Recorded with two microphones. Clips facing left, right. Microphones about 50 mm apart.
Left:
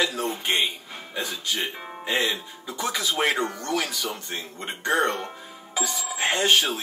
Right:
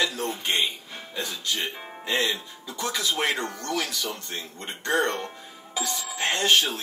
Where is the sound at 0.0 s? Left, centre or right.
Left.